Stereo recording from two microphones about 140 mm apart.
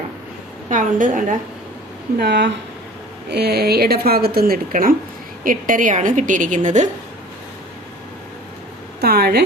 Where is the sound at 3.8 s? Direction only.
90° right.